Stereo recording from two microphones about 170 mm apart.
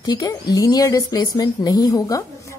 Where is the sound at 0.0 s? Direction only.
20° left (ahead or behind).